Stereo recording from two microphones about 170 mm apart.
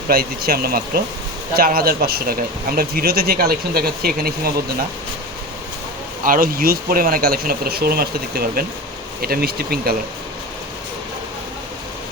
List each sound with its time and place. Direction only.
0.1 s speech: 60° right (ahead or behind)
6.2 s speech: 55° right (ahead or behind)